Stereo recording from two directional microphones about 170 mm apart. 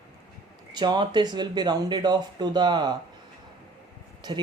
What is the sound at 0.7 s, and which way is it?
Speech, 25° right (ahead or behind).